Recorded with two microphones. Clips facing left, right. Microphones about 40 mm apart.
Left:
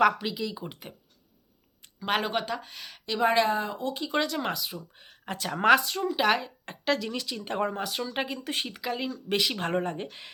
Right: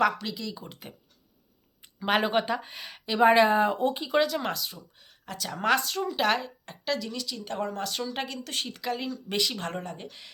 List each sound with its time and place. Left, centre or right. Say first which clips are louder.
0.2 s speech: left 3 dB; centre
1.8 s speech: right 3 dB; centre; by 3.9 s right
4.1 s a woman's voice: even; centre
4.9 s speech: even; left
5.6 s a woman's voice: left 4 dB; centre
6.7 s a woman's voice: left 4 dB; left
7.9 s speech: left 1 dB; centre
8.8 s speech: even; centre; by 10.3 s left